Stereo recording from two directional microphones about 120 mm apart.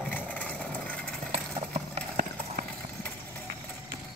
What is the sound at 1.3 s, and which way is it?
Clip-clop, 65° right (ahead or behind).